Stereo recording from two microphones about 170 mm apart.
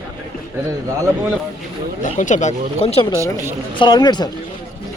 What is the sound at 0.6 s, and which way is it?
Speech, 15° right (ahead or behind).